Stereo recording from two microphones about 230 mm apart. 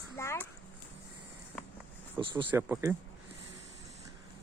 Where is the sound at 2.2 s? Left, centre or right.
Right.